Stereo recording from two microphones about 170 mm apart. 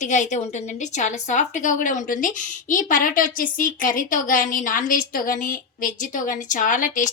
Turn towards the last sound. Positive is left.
turn(degrees=50)  # may be behind; listen again after turning